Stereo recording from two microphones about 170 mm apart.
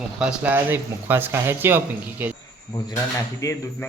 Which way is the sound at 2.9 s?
20° left (ahead or behind).